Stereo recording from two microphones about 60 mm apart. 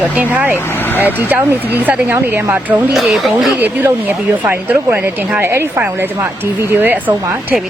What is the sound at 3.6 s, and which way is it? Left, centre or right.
Speech, right.